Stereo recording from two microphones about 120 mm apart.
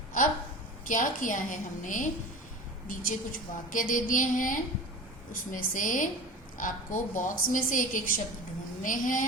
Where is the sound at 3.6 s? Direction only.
90° left.